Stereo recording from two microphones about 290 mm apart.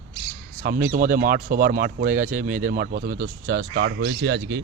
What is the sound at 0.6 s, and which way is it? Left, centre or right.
Speech, right.